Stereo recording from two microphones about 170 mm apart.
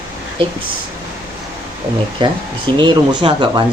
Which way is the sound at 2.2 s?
25° right (ahead or behind).